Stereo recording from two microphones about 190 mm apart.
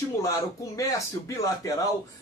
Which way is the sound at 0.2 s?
15° left (ahead or behind).